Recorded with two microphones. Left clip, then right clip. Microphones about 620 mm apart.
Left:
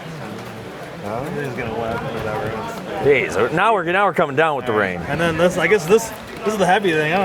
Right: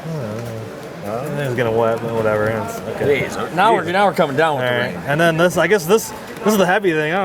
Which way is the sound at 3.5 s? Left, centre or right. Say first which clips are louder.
Right 4 dB; left.